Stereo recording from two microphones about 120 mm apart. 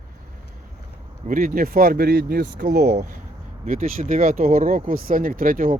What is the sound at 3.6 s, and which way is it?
Speech, 90° right.